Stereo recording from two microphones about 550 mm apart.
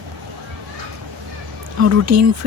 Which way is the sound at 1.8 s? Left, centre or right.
Right.